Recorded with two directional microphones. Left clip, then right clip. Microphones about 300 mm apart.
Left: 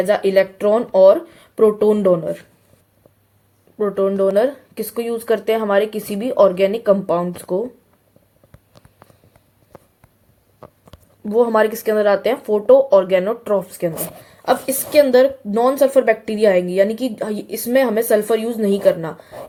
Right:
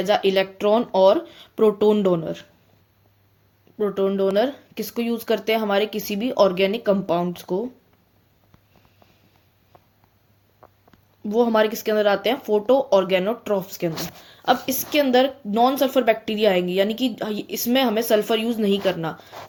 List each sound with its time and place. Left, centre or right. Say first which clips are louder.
0.1 s speech: left 2 dB; centre
3.8 s speech: left 4 dB; centre
11.3 s a woman's voice: left 4 dB; centre